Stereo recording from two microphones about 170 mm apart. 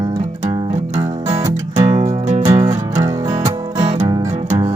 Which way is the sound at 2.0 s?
45° right (ahead or behind).